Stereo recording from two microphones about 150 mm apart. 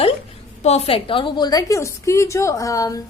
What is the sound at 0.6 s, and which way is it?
A woman's voice, 40° left (ahead or behind).